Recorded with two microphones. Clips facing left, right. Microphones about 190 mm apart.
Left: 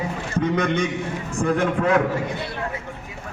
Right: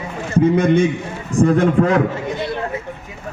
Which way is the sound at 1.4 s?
40° right (ahead or behind).